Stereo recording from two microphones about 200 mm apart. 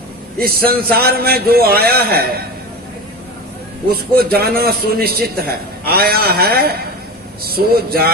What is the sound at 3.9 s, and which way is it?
A man's voice, 50° right (ahead or behind).